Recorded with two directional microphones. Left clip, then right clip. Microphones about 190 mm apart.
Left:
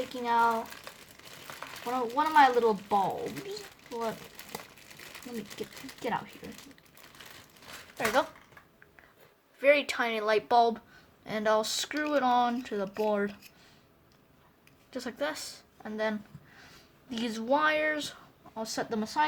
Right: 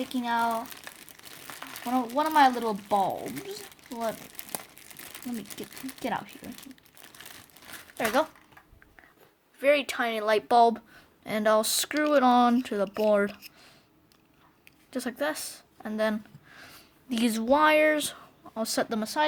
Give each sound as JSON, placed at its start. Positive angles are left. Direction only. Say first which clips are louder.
{"t": 0.1, "sound": "speech", "louder": "left 1 dB", "side_deg": -50}
{"t": 7.9, "sound": "speech", "louder": "right 2 dB", "side_deg": -35}
{"t": 9.6, "sound": "speech", "louder": "right 1 dB", "side_deg": -20}
{"t": 14.9, "sound": "speech", "louder": "right 3 dB", "side_deg": -30}